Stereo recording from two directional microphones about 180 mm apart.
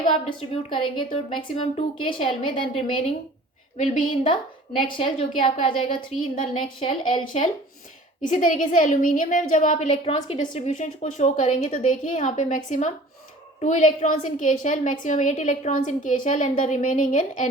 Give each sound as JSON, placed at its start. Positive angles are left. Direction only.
{"t": 0.3, "sound": "a woman's voice", "side_deg": 30}
{"t": 8.2, "sound": "a woman's voice", "side_deg": 45}